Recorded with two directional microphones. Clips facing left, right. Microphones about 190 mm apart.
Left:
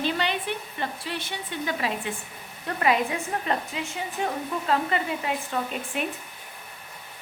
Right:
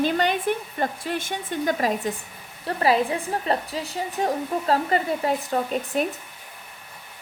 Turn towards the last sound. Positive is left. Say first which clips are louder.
# right 6 dB
turn(degrees=-40)  # may be behind; listen again after turning